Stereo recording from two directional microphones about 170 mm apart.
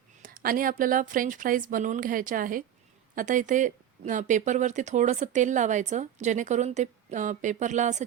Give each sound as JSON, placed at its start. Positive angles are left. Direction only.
{"t": 0.2, "sound": "speech", "side_deg": -55}